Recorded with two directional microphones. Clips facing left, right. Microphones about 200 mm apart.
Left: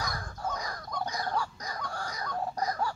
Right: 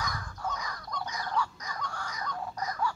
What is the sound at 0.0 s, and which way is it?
Chicken, 35° left (ahead or behind).